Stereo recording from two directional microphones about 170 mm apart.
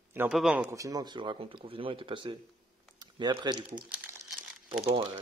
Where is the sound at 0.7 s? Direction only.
20° right (ahead or behind).